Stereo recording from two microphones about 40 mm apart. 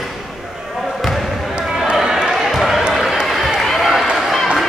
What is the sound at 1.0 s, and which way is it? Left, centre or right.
Basketball bounce, centre.